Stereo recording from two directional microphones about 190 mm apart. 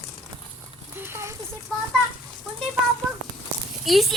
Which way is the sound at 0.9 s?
10° right (ahead or behind).